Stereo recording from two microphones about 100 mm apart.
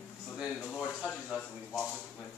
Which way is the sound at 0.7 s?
10° left (ahead or behind).